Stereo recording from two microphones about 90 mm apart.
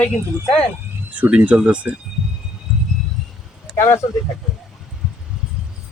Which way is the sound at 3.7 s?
30° left (ahead or behind).